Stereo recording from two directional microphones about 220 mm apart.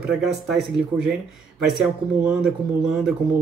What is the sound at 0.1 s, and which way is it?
Speech, centre (ahead or behind).